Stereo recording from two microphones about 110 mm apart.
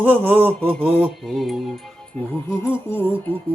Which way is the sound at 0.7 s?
5° left (ahead or behind).